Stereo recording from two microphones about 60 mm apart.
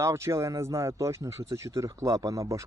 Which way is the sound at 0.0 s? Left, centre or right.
Right.